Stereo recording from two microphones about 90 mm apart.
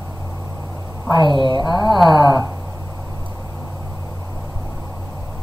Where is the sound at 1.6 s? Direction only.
50° left (ahead or behind).